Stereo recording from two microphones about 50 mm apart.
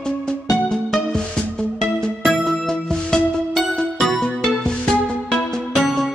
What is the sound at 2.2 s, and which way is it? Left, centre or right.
Music, centre.